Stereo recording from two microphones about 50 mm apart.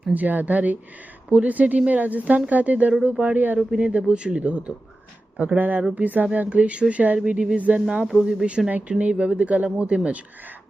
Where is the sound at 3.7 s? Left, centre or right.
Right.